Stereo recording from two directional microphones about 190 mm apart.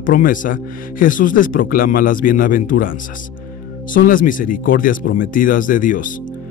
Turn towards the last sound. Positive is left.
turn(degrees=45)  # may be behind; listen again after turning